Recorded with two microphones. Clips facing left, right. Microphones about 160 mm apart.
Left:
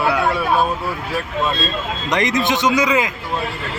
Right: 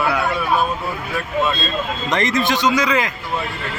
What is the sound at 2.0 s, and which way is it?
Speech, 15° left (ahead or behind).